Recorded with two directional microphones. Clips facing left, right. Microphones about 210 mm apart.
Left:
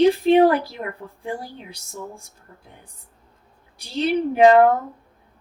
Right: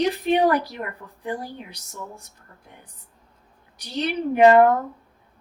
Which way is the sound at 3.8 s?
30° left (ahead or behind).